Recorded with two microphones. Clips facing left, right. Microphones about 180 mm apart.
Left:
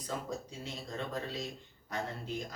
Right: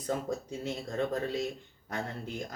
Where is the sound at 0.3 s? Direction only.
50° right (ahead or behind).